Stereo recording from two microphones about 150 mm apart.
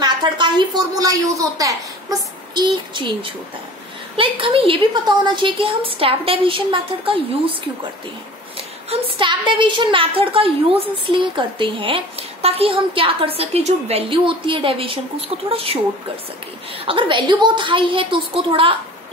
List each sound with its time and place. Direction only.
0.0 s a woman's voice: 30° right (ahead or behind)
8.9 s a woman's voice: 35° right (ahead or behind)
16.8 s a woman's voice: 35° right (ahead or behind)